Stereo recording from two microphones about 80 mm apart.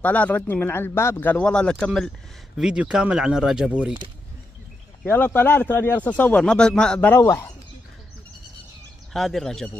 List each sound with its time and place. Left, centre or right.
0.0 s speech: centre
1.2 s speech: centre
2.5 s speech: centre
5.0 s speech: left
6.4 s speech: centre
7.2 s speech: left
9.1 s speech: centre